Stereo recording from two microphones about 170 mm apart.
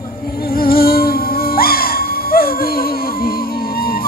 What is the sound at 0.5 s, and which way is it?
Music, 60° left (ahead or behind).